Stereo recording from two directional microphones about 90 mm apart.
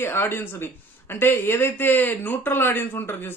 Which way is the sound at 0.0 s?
25° left (ahead or behind).